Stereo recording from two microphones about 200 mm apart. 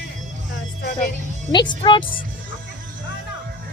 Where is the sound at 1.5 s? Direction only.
20° left (ahead or behind).